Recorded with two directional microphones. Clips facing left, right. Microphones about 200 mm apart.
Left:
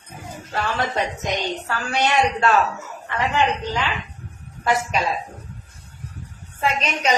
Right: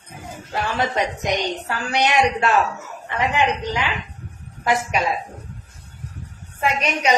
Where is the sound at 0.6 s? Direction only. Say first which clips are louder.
Right 1 dB; 15° right (ahead or behind).